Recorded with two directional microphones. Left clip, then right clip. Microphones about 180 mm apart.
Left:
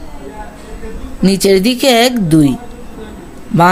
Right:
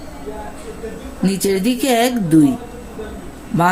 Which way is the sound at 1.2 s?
55° left (ahead or behind).